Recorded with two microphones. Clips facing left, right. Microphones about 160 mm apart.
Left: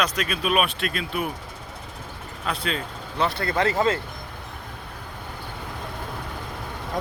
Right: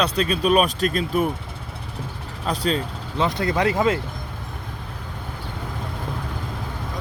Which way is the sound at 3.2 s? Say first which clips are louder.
Right 2 dB; 15° right (ahead or behind).